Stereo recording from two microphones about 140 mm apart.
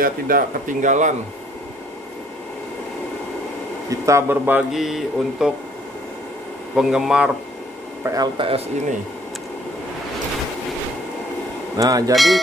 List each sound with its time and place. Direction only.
0.0 s speech: 90° right; by 1.1 s 60° right (ahead or behind)
3.9 s speech: 20° right (ahead or behind)
4.7 s speech: centre (ahead or behind)
6.7 s speech: 5° right (ahead or behind)
8.0 s speech: 25° right (ahead or behind)
8.4 s speech: 40° right (ahead or behind)
11.7 s speech: 25° right (ahead or behind)